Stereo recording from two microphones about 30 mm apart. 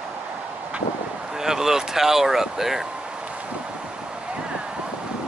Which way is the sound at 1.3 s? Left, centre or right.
Centre.